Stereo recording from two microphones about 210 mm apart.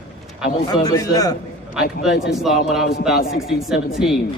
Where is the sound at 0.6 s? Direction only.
15° left (ahead or behind).